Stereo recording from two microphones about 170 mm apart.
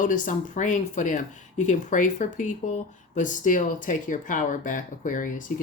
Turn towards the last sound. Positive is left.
turn(degrees=50)  # may be behind; listen again after turning